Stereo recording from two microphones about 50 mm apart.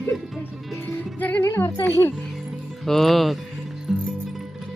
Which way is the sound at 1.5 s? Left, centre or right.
Left.